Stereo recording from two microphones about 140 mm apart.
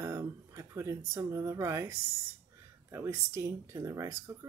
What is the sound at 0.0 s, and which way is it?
Speech, 20° right (ahead or behind).